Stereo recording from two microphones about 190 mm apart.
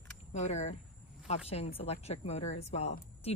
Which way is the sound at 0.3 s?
35° left (ahead or behind).